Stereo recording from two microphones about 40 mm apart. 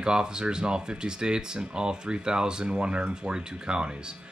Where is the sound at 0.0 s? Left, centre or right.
Centre.